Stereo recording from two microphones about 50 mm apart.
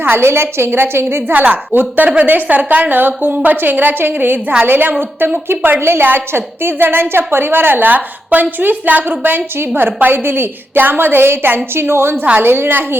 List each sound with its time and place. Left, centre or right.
0.0 s a woman's voice: right
1.5 s a woman's voice: right